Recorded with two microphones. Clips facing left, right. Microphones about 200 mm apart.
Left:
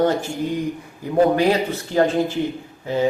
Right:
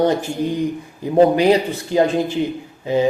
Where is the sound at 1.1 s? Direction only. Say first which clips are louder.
Right 3 dB; 20° right (ahead or behind).